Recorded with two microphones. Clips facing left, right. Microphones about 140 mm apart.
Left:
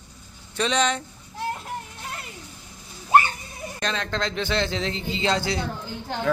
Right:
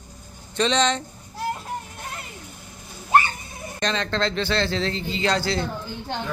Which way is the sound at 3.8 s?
5° left (ahead or behind).